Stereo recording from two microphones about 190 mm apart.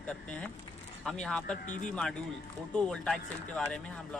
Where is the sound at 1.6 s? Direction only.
40° left (ahead or behind).